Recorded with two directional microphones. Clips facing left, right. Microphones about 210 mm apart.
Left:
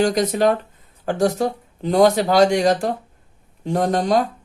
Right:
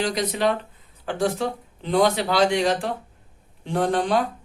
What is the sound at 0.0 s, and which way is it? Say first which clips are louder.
Speech: left 6 dB; 45° left (ahead or behind).